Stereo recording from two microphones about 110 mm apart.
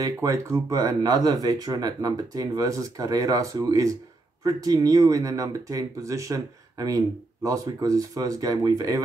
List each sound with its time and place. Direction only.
0.0 s speech: 30° right (ahead or behind)